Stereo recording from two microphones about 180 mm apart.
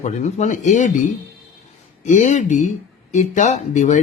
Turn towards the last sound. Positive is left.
turn(degrees=40)  # may be behind; listen again after turning